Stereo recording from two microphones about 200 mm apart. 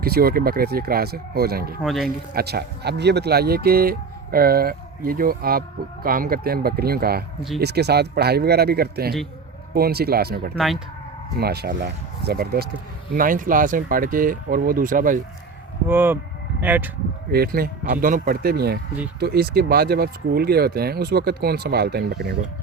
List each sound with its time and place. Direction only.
0.0 s speech: 50° right (ahead or behind)
1.8 s speech: centre (ahead or behind)
2.0 s speech: 50° right (ahead or behind)
15.9 s speech: 10° right (ahead or behind)
17.3 s speech: 50° right (ahead or behind)